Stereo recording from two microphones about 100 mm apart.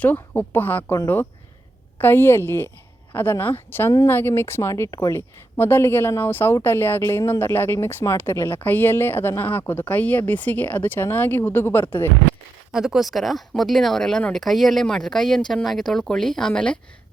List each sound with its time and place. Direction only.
0.0 s speech: 20° left (ahead or behind)
5.5 s speech: 20° left (ahead or behind)
12.7 s speech: 5° right (ahead or behind)